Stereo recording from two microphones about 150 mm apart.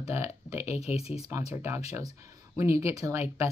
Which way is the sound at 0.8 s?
45° left (ahead or behind).